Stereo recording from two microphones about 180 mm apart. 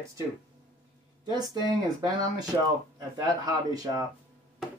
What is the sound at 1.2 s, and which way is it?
Speech, 20° right (ahead or behind).